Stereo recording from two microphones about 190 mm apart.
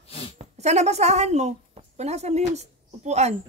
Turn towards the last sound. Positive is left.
turn(degrees=-35)  # may be behind; listen again after turning